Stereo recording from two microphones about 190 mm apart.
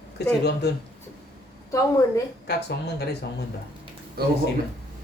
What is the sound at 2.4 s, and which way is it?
Speech, 60° left (ahead or behind).